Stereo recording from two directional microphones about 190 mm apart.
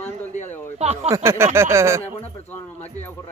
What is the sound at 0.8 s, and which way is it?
Speech, 35° right (ahead or behind).